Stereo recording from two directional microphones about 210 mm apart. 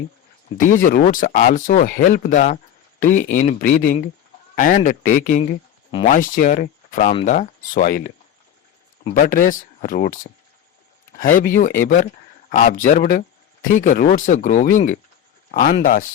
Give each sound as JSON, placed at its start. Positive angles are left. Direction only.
{"t": 0.5, "sound": "speech", "side_deg": 40}